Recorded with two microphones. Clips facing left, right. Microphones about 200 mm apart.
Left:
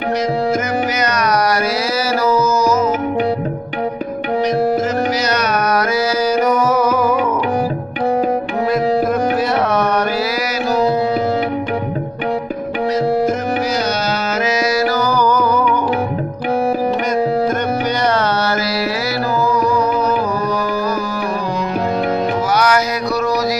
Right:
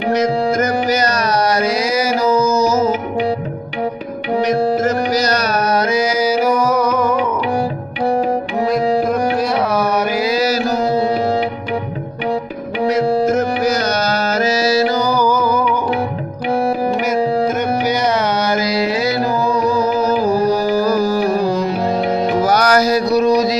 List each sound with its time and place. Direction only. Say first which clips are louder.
0.6 s carnatic music: right 2 dB; 35° right (ahead or behind)
2.2 s music: even; 15° right (ahead or behind)
5.1 s music: right 1 dB; 35° right (ahead or behind); by 7.2 s 5° left (ahead or behind)
14.1 s music: right 2 dB; 35° right (ahead or behind); by 15.4 s 10° right (ahead or behind)
17.3 s music: even; 5° right (ahead or behind)
18.5 s music: right 2 dB; 15° right (ahead or behind); by 23.0 s 40° right (ahead or behind)